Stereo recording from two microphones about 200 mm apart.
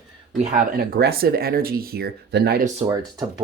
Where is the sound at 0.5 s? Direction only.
50° right (ahead or behind).